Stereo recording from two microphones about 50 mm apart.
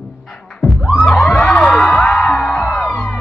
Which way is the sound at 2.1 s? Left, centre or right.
Centre.